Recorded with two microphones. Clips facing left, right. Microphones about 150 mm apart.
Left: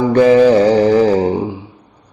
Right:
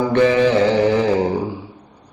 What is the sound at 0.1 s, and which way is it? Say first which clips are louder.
Mantra: left 7 dB; 40° left (ahead or behind).